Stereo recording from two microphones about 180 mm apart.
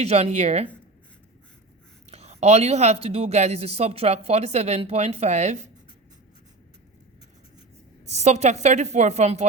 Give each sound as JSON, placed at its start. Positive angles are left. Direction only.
{"t": 0.0, "sound": "a woman's voice", "side_deg": -35}
{"t": 2.0, "sound": "a woman's voice", "side_deg": -35}
{"t": 8.0, "sound": "a woman's voice", "side_deg": -40}